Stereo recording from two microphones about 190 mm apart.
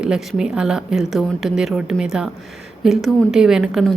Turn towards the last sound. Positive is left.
turn(degrees=0)  # may be behind; listen again after turning